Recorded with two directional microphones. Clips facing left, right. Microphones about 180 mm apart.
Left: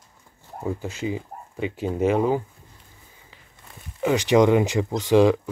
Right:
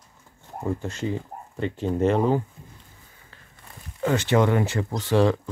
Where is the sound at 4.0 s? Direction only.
15° left (ahead or behind).